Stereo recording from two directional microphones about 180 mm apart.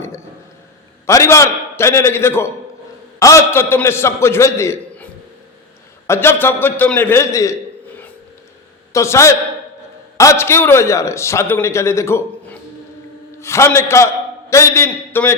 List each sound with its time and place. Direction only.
1.0 s a man's voice: 15° left (ahead or behind)
6.1 s a man's voice: 10° left (ahead or behind)
8.9 s a man's voice: 15° left (ahead or behind)